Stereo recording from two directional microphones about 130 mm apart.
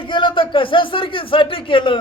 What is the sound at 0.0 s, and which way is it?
A man's voice, 40° left (ahead or behind).